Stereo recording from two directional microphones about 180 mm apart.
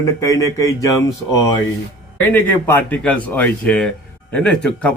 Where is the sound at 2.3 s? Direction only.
10° left (ahead or behind).